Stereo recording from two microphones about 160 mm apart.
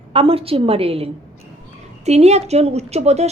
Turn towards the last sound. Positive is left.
turn(degrees=-45)  # may be behind; listen again after turning